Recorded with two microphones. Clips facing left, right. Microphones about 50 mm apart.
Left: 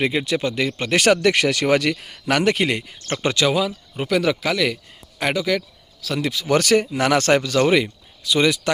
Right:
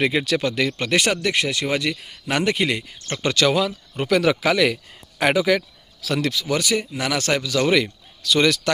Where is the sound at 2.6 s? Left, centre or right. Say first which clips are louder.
Left 1 dB; left.